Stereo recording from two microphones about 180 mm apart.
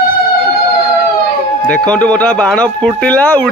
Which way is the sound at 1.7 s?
5° left (ahead or behind).